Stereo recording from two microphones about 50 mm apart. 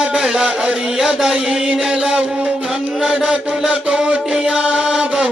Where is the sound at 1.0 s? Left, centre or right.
Centre.